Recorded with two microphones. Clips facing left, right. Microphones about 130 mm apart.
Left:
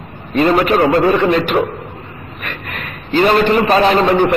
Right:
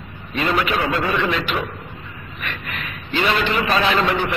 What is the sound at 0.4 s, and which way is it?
A man's voice, 45° left (ahead or behind).